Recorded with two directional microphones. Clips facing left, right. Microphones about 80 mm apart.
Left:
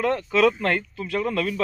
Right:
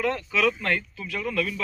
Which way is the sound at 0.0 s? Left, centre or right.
Left.